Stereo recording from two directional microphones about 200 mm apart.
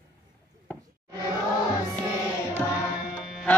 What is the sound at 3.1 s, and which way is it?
Music, 5° right (ahead or behind).